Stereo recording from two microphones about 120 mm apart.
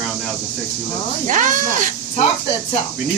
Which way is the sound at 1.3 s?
90° right.